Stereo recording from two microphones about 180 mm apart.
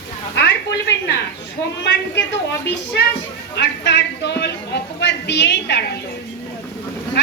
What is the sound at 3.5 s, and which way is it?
Speech, 70° left (ahead or behind).